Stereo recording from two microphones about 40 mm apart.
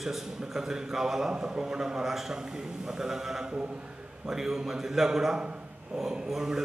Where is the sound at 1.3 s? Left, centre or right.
Right.